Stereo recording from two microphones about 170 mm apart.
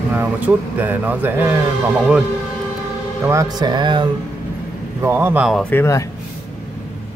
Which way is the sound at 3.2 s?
20° right (ahead or behind).